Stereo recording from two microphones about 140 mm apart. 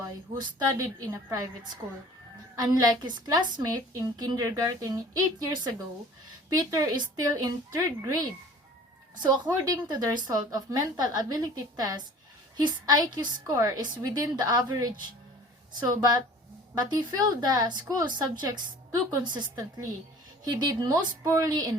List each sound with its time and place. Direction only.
0.3 s a woman's voice: 25° right (ahead or behind)
2.6 s a woman's voice: 25° right (ahead or behind)
9.2 s a woman's voice: 30° right (ahead or behind)